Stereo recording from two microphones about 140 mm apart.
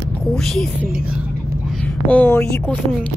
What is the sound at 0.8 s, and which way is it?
Speech, 5° right (ahead or behind).